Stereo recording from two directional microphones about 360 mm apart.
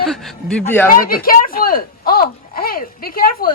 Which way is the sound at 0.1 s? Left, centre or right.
Centre.